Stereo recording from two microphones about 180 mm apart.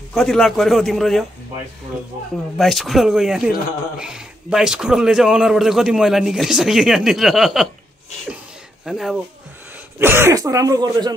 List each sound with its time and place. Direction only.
0.1 s speech: 5° left (ahead or behind)
2.5 s speech: centre (ahead or behind)
8.8 s speech: centre (ahead or behind)
9.9 s speech: 15° right (ahead or behind)